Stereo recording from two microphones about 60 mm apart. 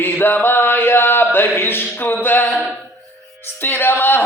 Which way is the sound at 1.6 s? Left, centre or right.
Left.